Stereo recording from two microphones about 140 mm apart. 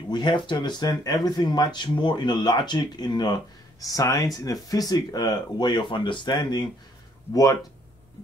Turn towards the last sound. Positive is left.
turn(degrees=25)  # may be behind; listen again after turning